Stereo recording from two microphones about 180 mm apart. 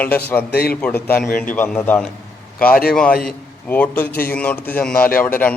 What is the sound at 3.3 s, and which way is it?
A man's voice, 10° left (ahead or behind).